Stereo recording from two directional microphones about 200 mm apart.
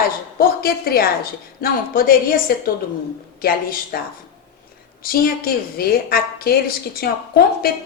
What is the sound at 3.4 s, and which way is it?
Speech, 45° left (ahead or behind).